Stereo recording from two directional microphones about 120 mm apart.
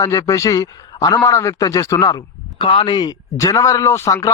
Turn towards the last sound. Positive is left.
turn(degrees=25)  # may be behind; listen again after turning